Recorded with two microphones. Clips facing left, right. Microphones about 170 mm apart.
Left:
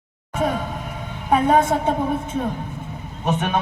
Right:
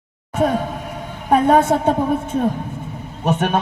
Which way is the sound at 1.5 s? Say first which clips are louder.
Right 3 dB; 60° right (ahead or behind).